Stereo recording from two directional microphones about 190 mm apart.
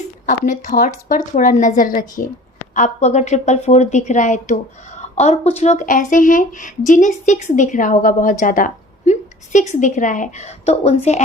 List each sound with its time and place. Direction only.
0.3 s a woman's voice: 40° left (ahead or behind)